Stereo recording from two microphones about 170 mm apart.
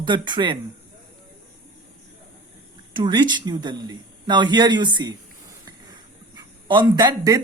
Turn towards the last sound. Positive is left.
turn(degrees=-25)  # may be behind; listen again after turning